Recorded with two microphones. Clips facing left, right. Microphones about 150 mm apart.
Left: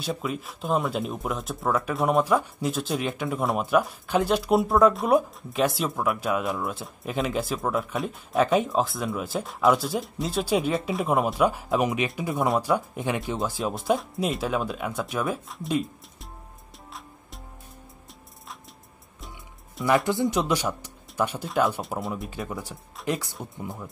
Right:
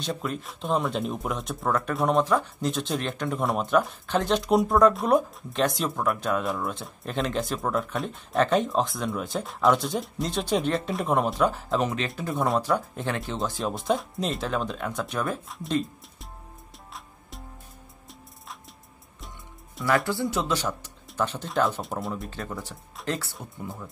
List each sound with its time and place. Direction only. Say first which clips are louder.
0.0 s speech: left 1 dB; 5° left (ahead or behind)
20.1 s speech: left 3 dB; 20° left (ahead or behind)